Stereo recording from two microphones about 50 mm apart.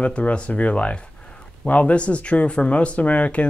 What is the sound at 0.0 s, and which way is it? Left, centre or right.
Speech, left.